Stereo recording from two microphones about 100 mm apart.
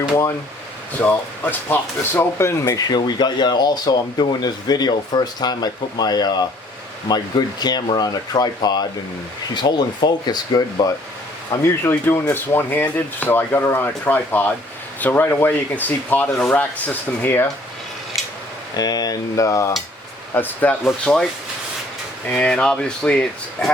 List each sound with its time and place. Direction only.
1.0 s speech: 20° left (ahead or behind)
2.7 s speech: 45° left (ahead or behind)
11.6 s speech: 25° left (ahead or behind)
18.8 s cutlery: 40° left (ahead or behind)
20.3 s speech: 20° left (ahead or behind)
20.8 s speech: 5° left (ahead or behind)
22.3 s speech: 10° left (ahead or behind)